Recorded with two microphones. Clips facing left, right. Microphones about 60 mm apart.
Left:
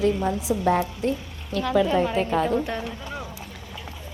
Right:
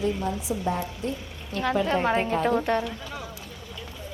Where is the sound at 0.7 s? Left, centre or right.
Left.